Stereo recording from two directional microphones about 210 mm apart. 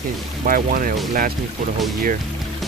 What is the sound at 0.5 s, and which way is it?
Speech, 40° right (ahead or behind).